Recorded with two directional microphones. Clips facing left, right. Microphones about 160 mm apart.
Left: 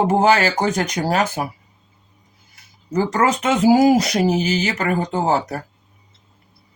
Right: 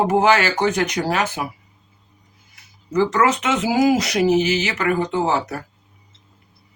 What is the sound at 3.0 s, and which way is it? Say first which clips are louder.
Speech: even; 30° left (ahead or behind).